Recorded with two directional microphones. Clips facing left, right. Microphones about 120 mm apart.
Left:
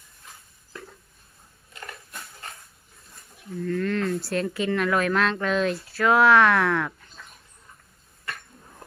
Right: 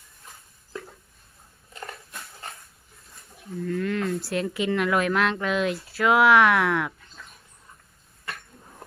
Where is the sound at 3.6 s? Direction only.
15° right (ahead or behind).